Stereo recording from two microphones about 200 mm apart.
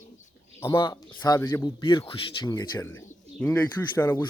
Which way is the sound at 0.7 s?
20° left (ahead or behind).